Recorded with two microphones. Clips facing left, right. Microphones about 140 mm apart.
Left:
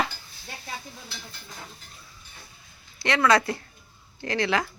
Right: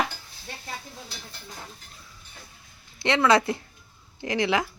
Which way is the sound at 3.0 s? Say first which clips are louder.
Right 1 dB; 20° right (ahead or behind).